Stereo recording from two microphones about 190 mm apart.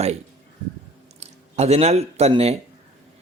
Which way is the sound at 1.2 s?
35° right (ahead or behind).